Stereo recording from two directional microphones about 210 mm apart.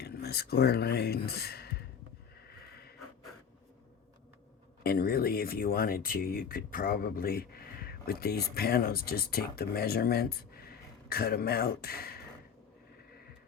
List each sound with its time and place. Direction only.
0.0 s speech: 50° left (ahead or behind)
4.8 s speech: 45° left (ahead or behind)